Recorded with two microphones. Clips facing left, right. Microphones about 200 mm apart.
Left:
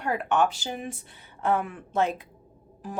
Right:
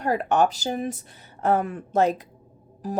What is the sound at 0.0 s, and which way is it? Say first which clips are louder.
A woman's voice: right 3 dB; 40° right (ahead or behind).